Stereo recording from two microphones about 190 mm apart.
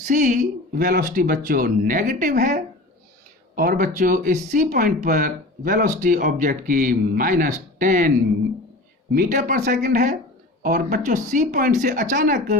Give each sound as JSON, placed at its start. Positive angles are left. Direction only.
{"t": 0.0, "sound": "speech", "side_deg": -40}
{"t": 9.1, "sound": "speech", "side_deg": -40}